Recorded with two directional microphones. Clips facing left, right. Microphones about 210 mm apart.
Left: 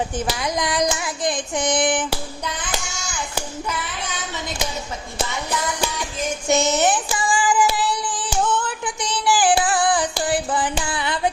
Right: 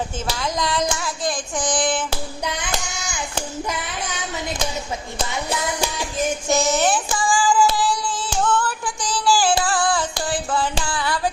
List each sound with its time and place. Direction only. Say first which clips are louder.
0.3 s child singing: right 1 dB; 15° left (ahead or behind)
6.5 s child singing: left 2 dB; 20° left (ahead or behind)
10.2 s a sound: left 1 dB; 20° left (ahead or behind)